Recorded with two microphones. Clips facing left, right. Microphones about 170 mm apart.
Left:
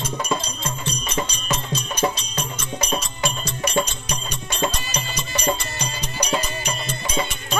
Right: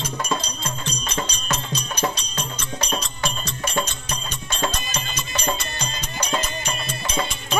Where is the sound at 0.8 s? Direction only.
10° left (ahead or behind).